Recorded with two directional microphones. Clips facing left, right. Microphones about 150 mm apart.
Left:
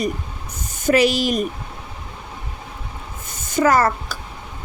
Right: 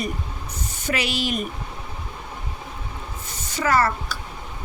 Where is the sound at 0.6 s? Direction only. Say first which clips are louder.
Left 11 dB; 45° left (ahead or behind).